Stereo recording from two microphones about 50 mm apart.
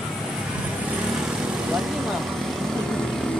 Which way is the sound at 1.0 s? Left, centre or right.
Centre.